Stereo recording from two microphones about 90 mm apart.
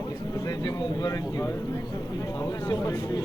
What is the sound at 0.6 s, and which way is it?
Speech, 45° left (ahead or behind).